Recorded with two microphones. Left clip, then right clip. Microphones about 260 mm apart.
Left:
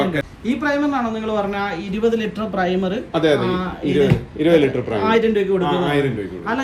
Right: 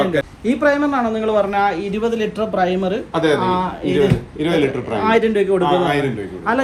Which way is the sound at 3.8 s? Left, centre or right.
Right.